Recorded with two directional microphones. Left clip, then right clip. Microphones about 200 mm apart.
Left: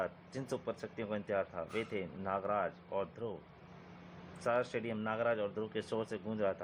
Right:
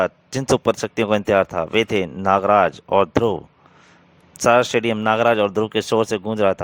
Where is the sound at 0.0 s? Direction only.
50° right (ahead or behind).